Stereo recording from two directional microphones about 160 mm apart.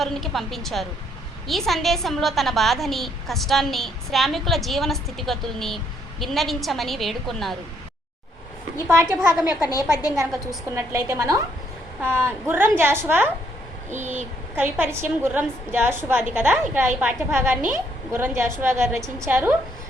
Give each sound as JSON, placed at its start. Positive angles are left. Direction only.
{"t": 0.0, "sound": "a woman's voice", "side_deg": 0}
{"t": 8.9, "sound": "a woman's voice", "side_deg": -15}
{"t": 10.8, "sound": "a woman's voice", "side_deg": -20}
{"t": 13.9, "sound": "speech", "side_deg": -50}
{"t": 14.5, "sound": "a woman's voice", "side_deg": -10}